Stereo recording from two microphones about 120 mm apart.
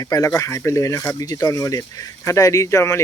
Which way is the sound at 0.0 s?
30° left (ahead or behind).